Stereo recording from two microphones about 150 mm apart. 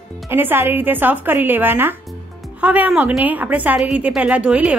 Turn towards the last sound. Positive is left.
turn(degrees=-10)  # may be behind; listen again after turning